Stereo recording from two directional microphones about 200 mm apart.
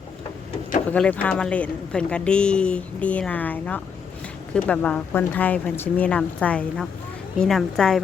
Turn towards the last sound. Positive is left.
turn(degrees=0)  # may be behind; listen again after turning